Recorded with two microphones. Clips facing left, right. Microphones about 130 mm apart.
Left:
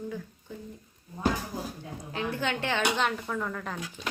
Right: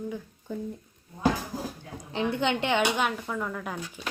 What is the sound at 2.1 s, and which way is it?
Speech, 25° right (ahead or behind).